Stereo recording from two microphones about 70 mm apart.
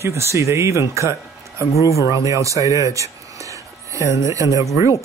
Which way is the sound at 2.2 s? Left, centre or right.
Right.